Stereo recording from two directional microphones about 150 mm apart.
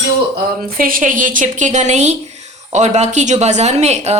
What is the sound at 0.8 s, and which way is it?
A woman's voice, 65° right (ahead or behind).